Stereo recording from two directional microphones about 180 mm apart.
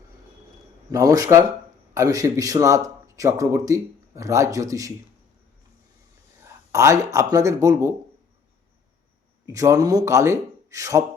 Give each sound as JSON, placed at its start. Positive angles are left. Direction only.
{"t": 0.9, "sound": "a man's voice", "side_deg": -20}
{"t": 6.7, "sound": "speech", "side_deg": -15}
{"t": 9.5, "sound": "speech", "side_deg": -20}